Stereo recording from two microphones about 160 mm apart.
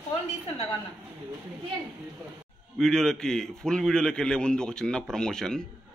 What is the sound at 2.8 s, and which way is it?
A man's voice, 5° left (ahead or behind).